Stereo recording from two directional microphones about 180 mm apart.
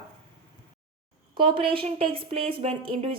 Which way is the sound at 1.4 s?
30° right (ahead or behind).